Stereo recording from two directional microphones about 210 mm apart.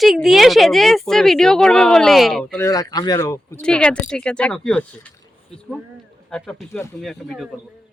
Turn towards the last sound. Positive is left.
turn(degrees=0)  # may be behind; listen again after turning